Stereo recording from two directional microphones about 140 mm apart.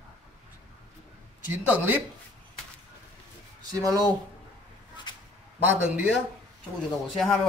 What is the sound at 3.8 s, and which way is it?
Speech, 25° right (ahead or behind).